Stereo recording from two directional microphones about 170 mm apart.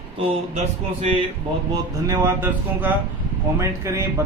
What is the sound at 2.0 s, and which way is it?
Speech, 15° right (ahead or behind).